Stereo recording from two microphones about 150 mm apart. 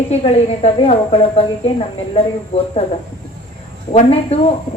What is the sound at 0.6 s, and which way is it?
Speech, 40° left (ahead or behind).